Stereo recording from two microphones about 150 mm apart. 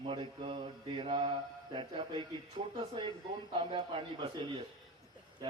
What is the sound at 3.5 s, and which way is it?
Mantra, 35° right (ahead or behind).